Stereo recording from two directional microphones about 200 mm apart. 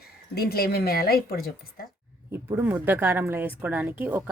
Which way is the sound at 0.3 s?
50° left (ahead or behind).